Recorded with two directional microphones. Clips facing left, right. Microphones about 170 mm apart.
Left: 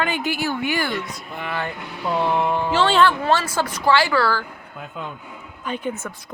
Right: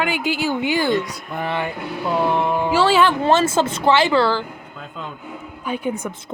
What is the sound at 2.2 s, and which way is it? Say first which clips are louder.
Speech: right 1 dB; centre (ahead or behind).